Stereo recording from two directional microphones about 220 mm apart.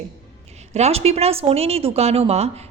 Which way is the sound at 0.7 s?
30° right (ahead or behind).